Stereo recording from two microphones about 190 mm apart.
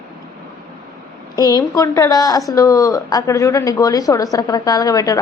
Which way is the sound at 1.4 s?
20° left (ahead or behind).